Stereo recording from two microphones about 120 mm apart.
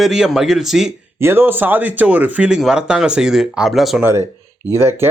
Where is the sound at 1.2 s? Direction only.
20° right (ahead or behind); by 4.0 s centre (ahead or behind).